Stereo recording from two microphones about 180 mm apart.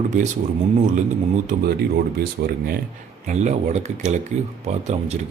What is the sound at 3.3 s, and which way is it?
A man's voice, 40° right (ahead or behind).